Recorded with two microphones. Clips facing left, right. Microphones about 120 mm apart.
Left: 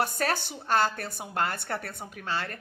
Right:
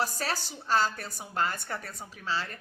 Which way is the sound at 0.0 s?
55° left (ahead or behind).